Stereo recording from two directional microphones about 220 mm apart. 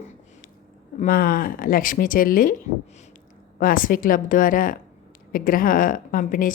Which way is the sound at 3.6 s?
40° left (ahead or behind).